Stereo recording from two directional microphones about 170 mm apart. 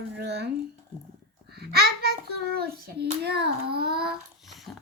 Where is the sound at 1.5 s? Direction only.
70° right (ahead or behind).